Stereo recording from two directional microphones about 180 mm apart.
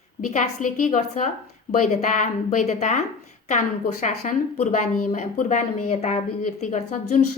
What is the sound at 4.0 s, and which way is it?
A woman's voice, 40° left (ahead or behind).